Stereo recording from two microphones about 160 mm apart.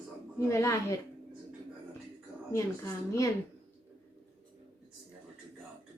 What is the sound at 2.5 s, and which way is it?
Speech, 20° left (ahead or behind).